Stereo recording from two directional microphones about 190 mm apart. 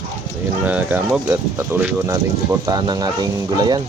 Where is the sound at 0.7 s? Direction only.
10° right (ahead or behind).